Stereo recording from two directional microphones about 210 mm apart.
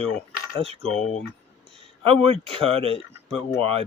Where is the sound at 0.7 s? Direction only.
30° right (ahead or behind).